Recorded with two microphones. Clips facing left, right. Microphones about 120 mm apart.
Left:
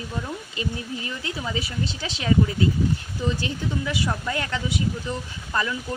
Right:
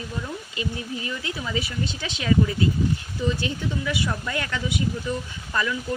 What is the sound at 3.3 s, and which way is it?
Speech, 35° left (ahead or behind).